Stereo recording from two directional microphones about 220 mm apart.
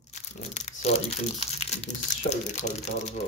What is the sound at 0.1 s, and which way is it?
Crumpling, 30° left (ahead or behind).